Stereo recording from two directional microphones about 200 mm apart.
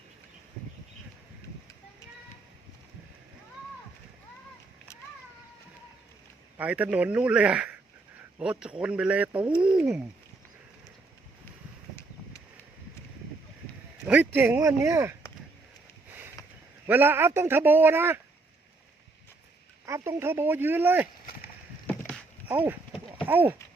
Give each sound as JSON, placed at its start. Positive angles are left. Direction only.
{"t": 6.6, "sound": "a man's voice", "side_deg": -5}
{"t": 14.1, "sound": "a man's voice", "side_deg": -10}
{"t": 16.4, "sound": "a sound", "side_deg": 15}
{"t": 16.8, "sound": "a man's voice", "side_deg": -10}
{"t": 19.8, "sound": "a man's voice", "side_deg": -15}
{"t": 21.8, "sound": "dog", "side_deg": 10}
{"t": 22.4, "sound": "a sound", "side_deg": -10}
{"t": 23.2, "sound": "speech", "side_deg": -10}